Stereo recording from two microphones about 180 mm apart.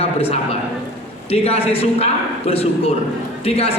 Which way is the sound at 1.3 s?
35° left (ahead or behind).